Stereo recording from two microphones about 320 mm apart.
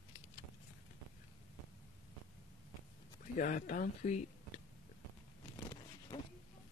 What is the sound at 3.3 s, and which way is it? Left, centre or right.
Speech, left.